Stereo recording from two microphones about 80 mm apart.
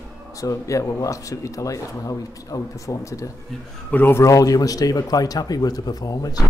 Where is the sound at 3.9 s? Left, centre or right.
Left.